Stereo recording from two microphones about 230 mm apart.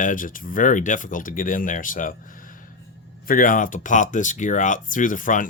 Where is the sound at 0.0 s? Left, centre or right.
Left.